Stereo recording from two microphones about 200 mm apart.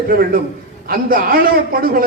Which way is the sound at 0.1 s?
45° right (ahead or behind).